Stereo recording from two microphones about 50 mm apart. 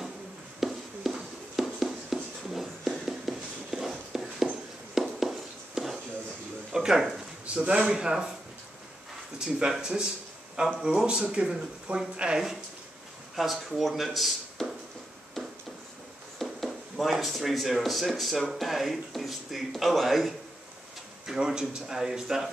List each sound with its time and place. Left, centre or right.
0.6 s writing: centre
5.0 s a sound: centre
6.7 s speech: centre
7.4 s speech: right
9.4 s speech: centre
13.4 s speech: centre
16.3 s speech: centre
21.3 s speech: centre